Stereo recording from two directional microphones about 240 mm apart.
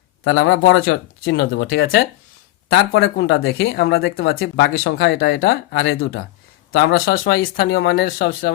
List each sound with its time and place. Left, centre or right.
0.3 s speech: left